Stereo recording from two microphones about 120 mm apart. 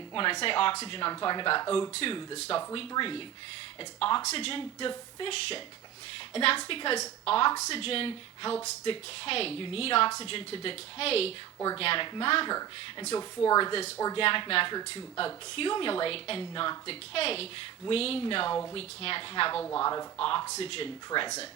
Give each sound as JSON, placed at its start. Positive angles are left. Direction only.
{"t": 0.1, "sound": "a woman's voice", "side_deg": 45}
{"t": 1.9, "sound": "a woman's voice", "side_deg": 50}
{"t": 4.3, "sound": "a woman's voice", "side_deg": 50}
{"t": 13.1, "sound": "a woman's voice", "side_deg": 35}
{"t": 14.8, "sound": "speech", "side_deg": 35}
{"t": 15.2, "sound": "a woman's voice", "side_deg": 50}
{"t": 19.6, "sound": "speech", "side_deg": 25}
{"t": 20.1, "sound": "a woman's voice", "side_deg": 45}
{"t": 21.1, "sound": "speech", "side_deg": 35}